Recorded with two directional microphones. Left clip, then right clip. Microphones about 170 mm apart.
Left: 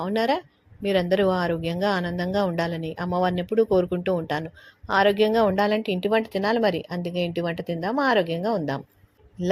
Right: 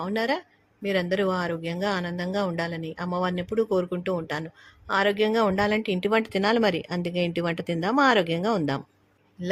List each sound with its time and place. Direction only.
0.0 s speech: 10° left (ahead or behind); by 8.8 s 10° right (ahead or behind)